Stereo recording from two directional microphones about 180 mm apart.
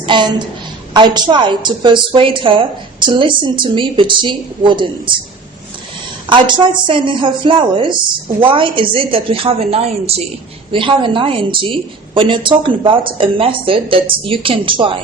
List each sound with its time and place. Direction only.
0.0 s a woman's voice: 25° right (ahead or behind)
6.2 s a woman's voice: 25° right (ahead or behind)